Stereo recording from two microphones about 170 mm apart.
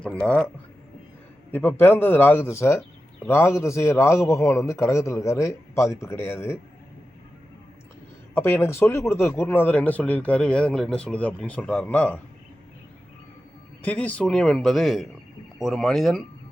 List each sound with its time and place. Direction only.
0.0 s a man's voice: 5° left (ahead or behind)
8.4 s a man's voice: 15° left (ahead or behind)
13.8 s speech: 10° left (ahead or behind)